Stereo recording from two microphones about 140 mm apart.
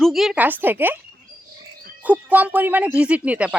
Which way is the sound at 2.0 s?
10° right (ahead or behind).